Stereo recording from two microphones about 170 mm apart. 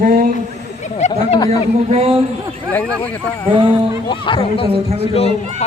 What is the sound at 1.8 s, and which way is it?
Speech, 35° right (ahead or behind).